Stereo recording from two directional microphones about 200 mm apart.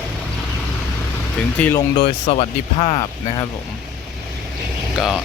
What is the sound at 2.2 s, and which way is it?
Speech, 30° left (ahead or behind).